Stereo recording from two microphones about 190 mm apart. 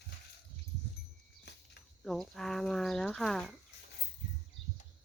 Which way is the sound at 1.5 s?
60° left (ahead or behind).